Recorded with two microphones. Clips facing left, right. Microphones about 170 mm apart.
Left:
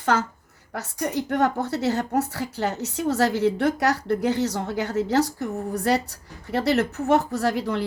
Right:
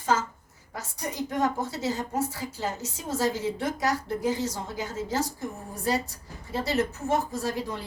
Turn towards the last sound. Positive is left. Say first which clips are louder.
# left 7 dB
turn(degrees=70)  # may be behind; listen again after turning